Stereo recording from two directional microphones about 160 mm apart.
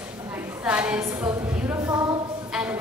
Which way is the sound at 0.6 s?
5° right (ahead or behind).